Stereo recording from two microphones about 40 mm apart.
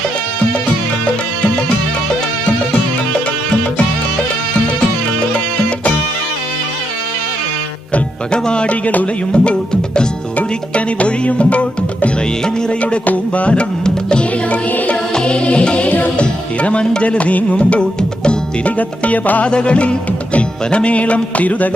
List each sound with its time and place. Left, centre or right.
8.3 s speech: left
9.3 s music: left
12.8 s music: left
18.6 s music: left
19.5 s music: left